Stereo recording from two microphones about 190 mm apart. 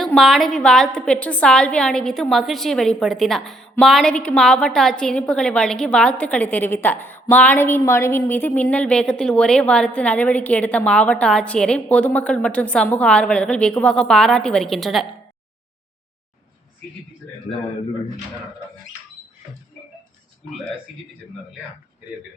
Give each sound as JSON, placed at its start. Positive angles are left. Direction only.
{"t": 0.0, "sound": "a woman's voice", "side_deg": 0}